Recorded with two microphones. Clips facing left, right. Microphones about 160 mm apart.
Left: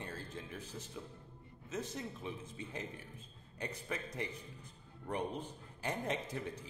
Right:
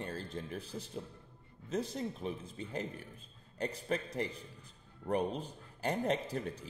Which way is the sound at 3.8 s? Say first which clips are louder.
Right 7 dB; 35° right (ahead or behind).